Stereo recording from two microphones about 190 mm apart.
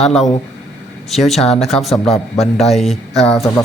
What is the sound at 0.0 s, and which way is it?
Speech, centre (ahead or behind).